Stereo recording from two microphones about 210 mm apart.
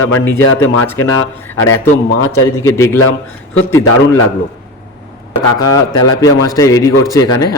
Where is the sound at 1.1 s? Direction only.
80° left.